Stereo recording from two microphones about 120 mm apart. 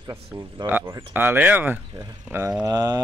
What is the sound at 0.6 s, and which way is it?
Speech, 20° right (ahead or behind).